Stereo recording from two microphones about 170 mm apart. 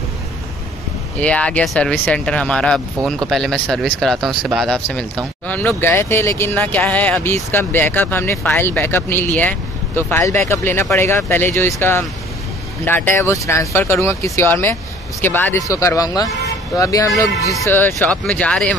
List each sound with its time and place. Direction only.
1.2 s speech: 5° left (ahead or behind)